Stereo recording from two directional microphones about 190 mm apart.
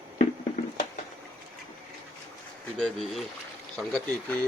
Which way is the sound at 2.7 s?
Centre (ahead or behind).